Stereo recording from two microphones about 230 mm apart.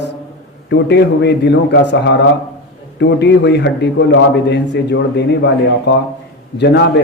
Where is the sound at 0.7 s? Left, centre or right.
Left.